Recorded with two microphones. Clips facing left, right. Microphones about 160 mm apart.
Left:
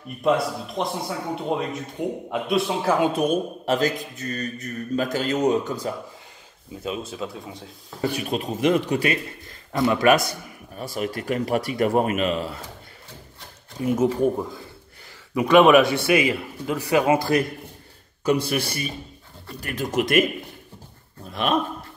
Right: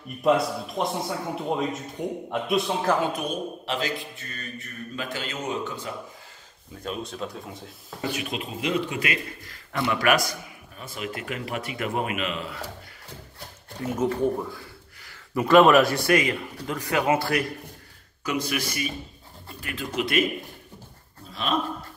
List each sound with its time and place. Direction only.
0.7 s speech: centre (ahead or behind)
3.3 s mantra: 45° left (ahead or behind)
6.8 s speech: 5° left (ahead or behind)
8.1 s mantra: 40° left (ahead or behind)
9.7 s speech: 25° left (ahead or behind)
10.8 s mantra: 40° left (ahead or behind)
13.7 s speech: 10° left (ahead or behind)
15.3 s speech: centre (ahead or behind)
18.2 s mantra: 35° left (ahead or behind)
19.6 s speech: 45° left (ahead or behind)
21.3 s a man's voice: 55° left (ahead or behind)